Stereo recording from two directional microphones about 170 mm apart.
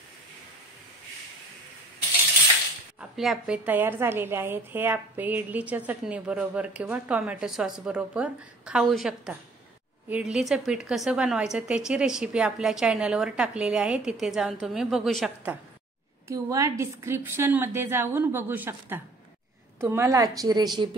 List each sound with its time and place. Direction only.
3.0 s a woman's voice: 5° right (ahead or behind)
16.3 s a woman's voice: 20° right (ahead or behind)